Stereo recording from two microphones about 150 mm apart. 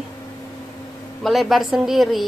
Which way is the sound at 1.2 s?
Centre (ahead or behind).